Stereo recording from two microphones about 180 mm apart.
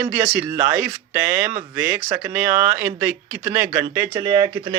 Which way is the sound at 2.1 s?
10° right (ahead or behind).